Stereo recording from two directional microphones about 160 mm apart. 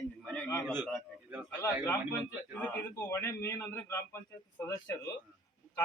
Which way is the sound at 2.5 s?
10° left (ahead or behind).